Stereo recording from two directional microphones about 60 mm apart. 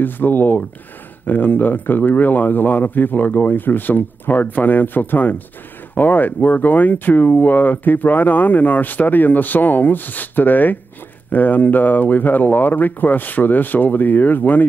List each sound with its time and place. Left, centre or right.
0.0 s speech: left